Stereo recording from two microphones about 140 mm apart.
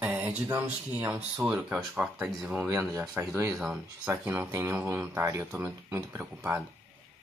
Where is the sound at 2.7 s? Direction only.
20° right (ahead or behind).